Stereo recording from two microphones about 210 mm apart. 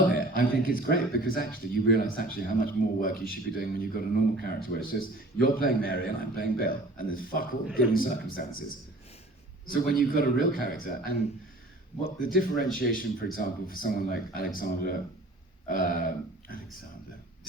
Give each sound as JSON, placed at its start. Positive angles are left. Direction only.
{"t": 0.1, "sound": "a man's voice", "side_deg": 45}
{"t": 9.6, "sound": "a man's voice", "side_deg": 40}
{"t": 12.2, "sound": "a man's voice", "side_deg": 45}